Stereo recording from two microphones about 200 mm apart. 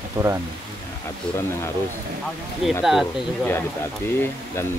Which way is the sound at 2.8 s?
Centre (ahead or behind).